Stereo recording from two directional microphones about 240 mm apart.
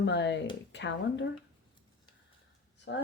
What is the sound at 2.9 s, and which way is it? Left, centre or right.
Speech, left.